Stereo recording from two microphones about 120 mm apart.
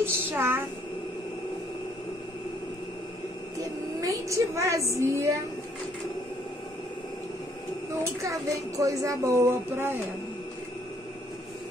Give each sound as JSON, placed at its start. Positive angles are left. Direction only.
{"t": 0.3, "sound": "a woman's voice", "side_deg": -20}
{"t": 4.0, "sound": "a woman's voice", "side_deg": -25}
{"t": 8.0, "sound": "a woman's voice", "side_deg": -25}